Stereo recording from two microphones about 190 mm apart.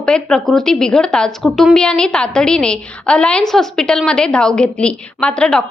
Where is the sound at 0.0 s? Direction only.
5° left (ahead or behind).